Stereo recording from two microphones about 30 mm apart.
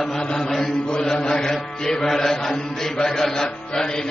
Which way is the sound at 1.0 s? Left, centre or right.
Centre.